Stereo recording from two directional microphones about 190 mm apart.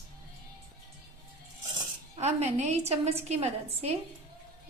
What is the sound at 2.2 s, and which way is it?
A woman's voice, 35° right (ahead or behind).